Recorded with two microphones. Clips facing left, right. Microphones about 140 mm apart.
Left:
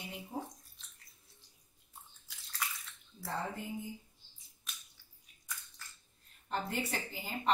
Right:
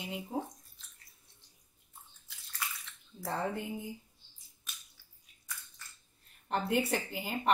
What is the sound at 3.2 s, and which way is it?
Speech, 70° right (ahead or behind).